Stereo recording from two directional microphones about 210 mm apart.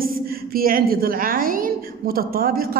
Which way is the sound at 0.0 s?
45° right (ahead or behind).